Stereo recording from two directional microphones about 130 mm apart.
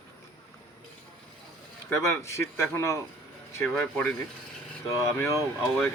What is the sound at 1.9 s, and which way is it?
Speech, 20° left (ahead or behind).